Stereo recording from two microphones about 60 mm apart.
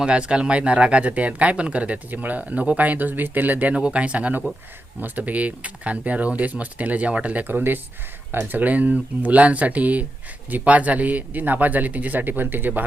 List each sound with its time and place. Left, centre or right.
0.0 s speech: centre
3.8 s speech: centre